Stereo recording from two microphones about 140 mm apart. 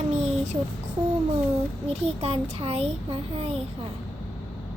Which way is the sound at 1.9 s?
45° right (ahead or behind).